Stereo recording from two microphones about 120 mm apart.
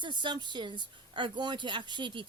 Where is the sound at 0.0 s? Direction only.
40° right (ahead or behind).